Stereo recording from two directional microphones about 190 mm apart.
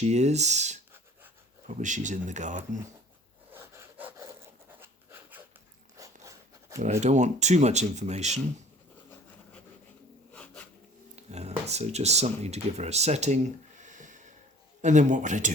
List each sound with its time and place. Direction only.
0.0 s speech: 35° right (ahead or behind)
3.5 s sawing: 10° right (ahead or behind)
4.8 s a sound: 10° right (ahead or behind)
7.0 s speech: 40° right (ahead or behind)
10.3 s a sound: 5° left (ahead or behind)
11.1 s speech: 35° right (ahead or behind)